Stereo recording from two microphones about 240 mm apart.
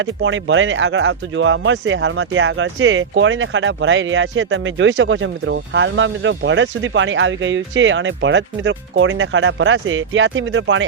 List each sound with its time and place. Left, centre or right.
0.0 s speech: right